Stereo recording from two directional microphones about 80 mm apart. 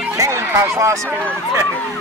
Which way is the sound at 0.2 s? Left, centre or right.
Right.